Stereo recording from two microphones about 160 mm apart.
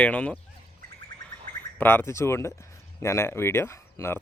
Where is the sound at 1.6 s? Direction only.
15° left (ahead or behind).